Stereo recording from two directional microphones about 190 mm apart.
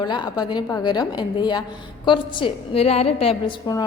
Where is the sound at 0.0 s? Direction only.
20° left (ahead or behind).